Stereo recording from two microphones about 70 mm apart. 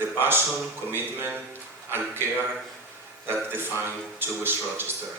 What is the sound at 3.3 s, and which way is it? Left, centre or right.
A man's voice, right.